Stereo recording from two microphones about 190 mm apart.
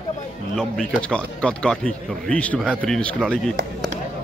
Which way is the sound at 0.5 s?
5° left (ahead or behind).